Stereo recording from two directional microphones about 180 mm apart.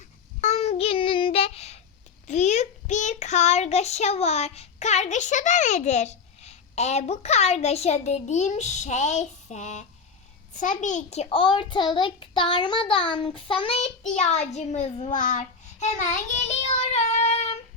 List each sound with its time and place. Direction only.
0.4 s child singing: 35° left (ahead or behind)
2.2 s a child's voice: 40° left (ahead or behind)